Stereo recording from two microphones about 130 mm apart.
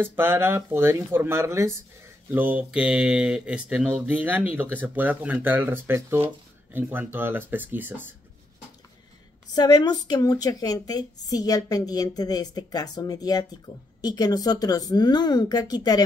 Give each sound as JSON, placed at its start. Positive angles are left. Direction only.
{"t": 0.0, "sound": "speech", "side_deg": -15}
{"t": 9.5, "sound": "a woman's voice", "side_deg": 30}